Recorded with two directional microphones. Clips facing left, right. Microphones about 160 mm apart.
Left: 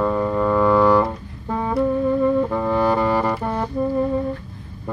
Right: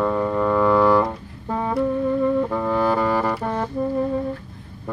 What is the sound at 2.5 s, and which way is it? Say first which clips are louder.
Music: left 1 dB; 15° left (ahead or behind).